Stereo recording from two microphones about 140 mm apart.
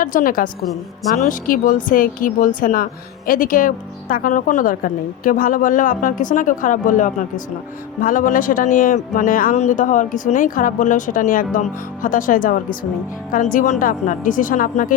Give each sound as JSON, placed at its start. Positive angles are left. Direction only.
{"t": 0.0, "sound": "a woman's voice", "side_deg": 75}
{"t": 9.6, "sound": "a woman's voice", "side_deg": 60}